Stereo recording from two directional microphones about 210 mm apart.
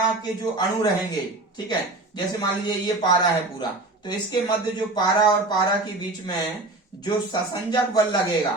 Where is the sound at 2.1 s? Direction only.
20° left (ahead or behind).